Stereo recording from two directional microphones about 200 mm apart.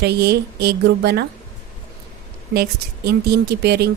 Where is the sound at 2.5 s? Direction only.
50° right (ahead or behind).